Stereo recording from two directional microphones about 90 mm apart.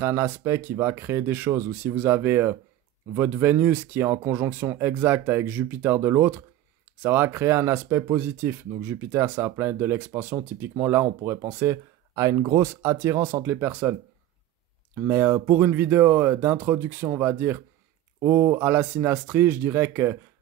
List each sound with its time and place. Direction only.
0.0 s speech: 30° right (ahead or behind)
15.0 s speech: 25° right (ahead or behind)